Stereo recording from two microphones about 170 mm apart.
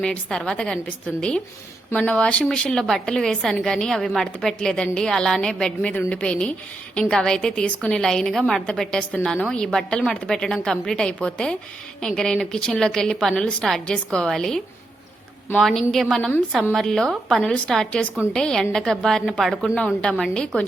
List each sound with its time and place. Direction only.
0.0 s a woman's voice: 5° left (ahead or behind)
15.6 s a woman's voice: centre (ahead or behind)